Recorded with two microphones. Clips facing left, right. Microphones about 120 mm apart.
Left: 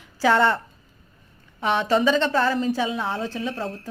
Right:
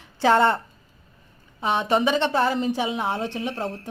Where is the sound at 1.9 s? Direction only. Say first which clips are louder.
Left 1 dB; 20° right (ahead or behind).